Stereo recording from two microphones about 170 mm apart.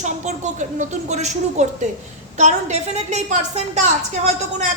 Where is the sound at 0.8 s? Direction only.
40° right (ahead or behind).